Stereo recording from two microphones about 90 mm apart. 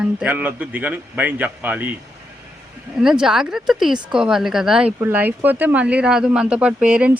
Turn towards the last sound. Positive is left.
turn(degrees=-15)  # may be behind; listen again after turning